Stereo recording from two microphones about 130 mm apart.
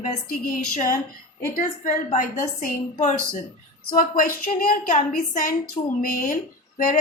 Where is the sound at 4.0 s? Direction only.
90° left.